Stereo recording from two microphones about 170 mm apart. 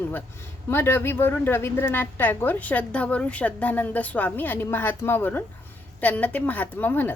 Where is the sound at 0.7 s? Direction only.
15° left (ahead or behind).